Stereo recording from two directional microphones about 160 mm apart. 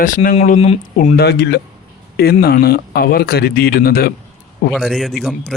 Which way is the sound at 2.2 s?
75° left (ahead or behind).